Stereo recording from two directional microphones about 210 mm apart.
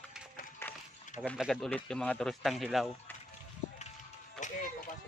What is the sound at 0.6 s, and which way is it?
Run, 10° left (ahead or behind).